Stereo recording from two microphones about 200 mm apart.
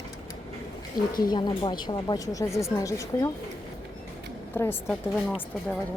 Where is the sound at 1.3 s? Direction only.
20° left (ahead or behind).